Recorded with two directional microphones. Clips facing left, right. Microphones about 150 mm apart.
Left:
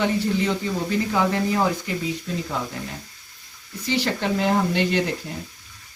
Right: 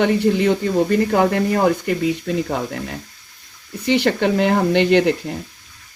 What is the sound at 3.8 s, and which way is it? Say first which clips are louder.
Speech: right 7 dB; 65° right (ahead or behind).